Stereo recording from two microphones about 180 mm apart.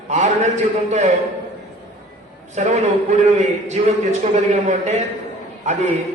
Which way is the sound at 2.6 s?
40° right (ahead or behind).